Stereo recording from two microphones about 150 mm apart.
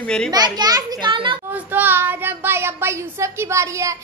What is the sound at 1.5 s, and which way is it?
Speech, 10° right (ahead or behind).